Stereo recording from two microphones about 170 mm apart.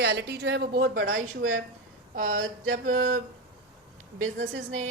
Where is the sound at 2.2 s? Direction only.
50° right (ahead or behind).